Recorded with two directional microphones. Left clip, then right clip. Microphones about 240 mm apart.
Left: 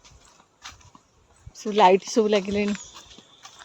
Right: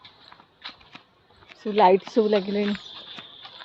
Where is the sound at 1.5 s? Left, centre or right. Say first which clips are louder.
Left 1 dB; left.